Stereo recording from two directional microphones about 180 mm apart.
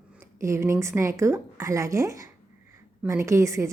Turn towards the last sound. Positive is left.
turn(degrees=-15)  # may be behind; listen again after turning